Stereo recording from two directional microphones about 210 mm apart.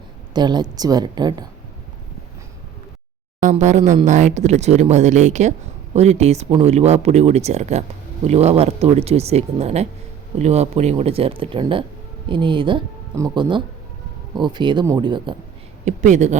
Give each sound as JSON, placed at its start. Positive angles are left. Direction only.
{"t": 0.3, "sound": "speech", "side_deg": -20}
{"t": 3.4, "sound": "speech", "side_deg": -35}
{"t": 15.8, "sound": "speech", "side_deg": -35}